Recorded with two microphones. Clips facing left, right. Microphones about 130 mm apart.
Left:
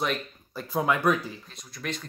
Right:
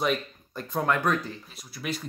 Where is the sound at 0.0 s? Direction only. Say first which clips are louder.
Right 2 dB; centre (ahead or behind).